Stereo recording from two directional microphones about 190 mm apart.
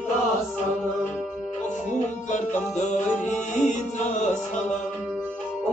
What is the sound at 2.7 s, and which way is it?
Music, 40° left (ahead or behind).